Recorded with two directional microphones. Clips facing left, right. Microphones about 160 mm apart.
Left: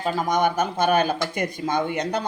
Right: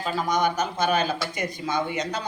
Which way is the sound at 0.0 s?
50° left (ahead or behind).